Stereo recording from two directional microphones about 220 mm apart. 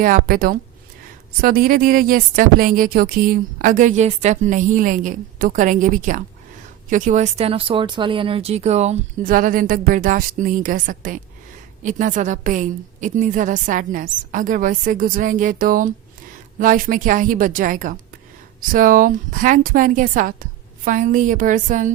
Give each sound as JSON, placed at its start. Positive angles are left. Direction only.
{"t": 0.0, "sound": "a woman's voice", "side_deg": -40}